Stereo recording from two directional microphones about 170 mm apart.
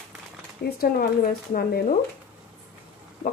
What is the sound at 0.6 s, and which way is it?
Speech, 60° left (ahead or behind).